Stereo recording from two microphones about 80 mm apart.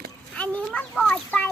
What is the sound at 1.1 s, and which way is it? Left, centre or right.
Speech, left.